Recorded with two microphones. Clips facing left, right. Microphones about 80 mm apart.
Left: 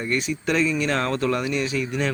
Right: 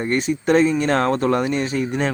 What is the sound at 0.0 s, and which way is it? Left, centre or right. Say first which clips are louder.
A man's voice: right 4 dB; right.